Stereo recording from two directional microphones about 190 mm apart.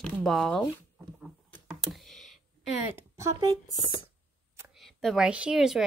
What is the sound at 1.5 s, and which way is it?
Computer keyboard, centre (ahead or behind).